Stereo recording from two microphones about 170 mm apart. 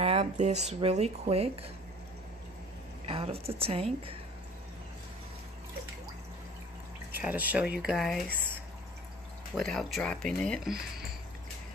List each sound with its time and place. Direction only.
0.0 s speech: 40° right (ahead or behind)
3.1 s speech: 35° right (ahead or behind)
7.1 s speech: 10° right (ahead or behind)
9.6 s speech: centre (ahead or behind)